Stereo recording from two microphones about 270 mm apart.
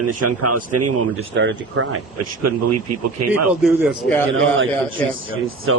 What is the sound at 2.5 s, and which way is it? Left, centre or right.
Speech, right.